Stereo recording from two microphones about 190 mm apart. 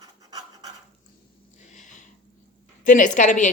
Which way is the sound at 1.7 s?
40° left (ahead or behind).